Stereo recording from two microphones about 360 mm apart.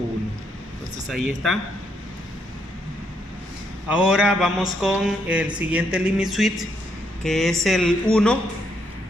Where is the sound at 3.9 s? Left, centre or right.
Centre.